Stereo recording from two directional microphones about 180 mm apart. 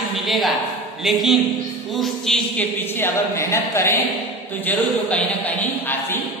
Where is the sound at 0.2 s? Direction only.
Centre (ahead or behind).